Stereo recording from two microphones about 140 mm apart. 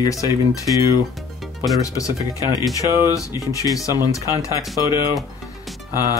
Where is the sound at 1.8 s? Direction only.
25° left (ahead or behind).